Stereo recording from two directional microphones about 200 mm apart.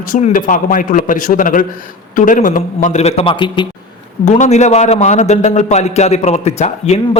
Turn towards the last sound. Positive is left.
turn(degrees=35)  # may be behind; listen again after turning